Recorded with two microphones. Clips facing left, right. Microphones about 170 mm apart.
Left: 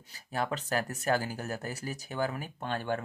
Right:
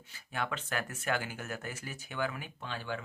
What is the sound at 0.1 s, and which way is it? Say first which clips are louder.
Speech: left 4 dB; 40° left (ahead or behind).